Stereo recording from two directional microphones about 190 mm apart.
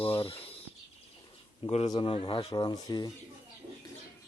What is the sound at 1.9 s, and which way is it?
Speech, 25° left (ahead or behind).